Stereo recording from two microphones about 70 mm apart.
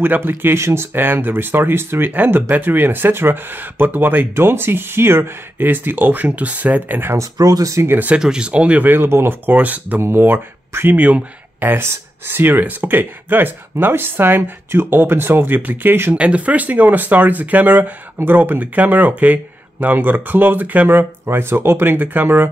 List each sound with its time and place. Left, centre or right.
0.0 s speech: right
7.2 s speech: right
7.8 s speech: right
8.1 s speech: centre; by 16.2 s right
16.2 s speech: centre